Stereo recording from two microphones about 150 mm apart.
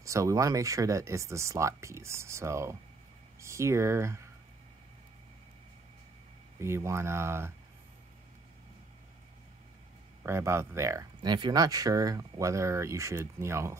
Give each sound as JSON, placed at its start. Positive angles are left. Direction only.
{"t": 0.0, "sound": "speech", "side_deg": -20}
{"t": 6.6, "sound": "speech", "side_deg": -15}
{"t": 10.2, "sound": "speech", "side_deg": -15}
{"t": 11.2, "sound": "speech", "side_deg": -30}